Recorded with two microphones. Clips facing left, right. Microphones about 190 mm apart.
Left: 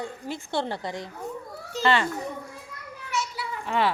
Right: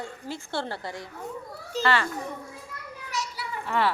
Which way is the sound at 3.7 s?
15° left (ahead or behind).